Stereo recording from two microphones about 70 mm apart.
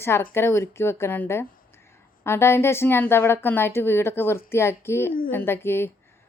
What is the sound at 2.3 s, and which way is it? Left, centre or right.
A woman's voice, left.